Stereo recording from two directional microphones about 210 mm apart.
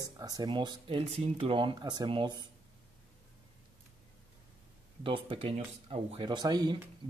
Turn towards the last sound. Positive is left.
turn(degrees=-20)  # may be behind; listen again after turning